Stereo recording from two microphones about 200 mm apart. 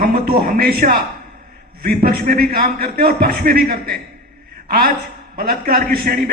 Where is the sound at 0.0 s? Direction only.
45° right (ahead or behind).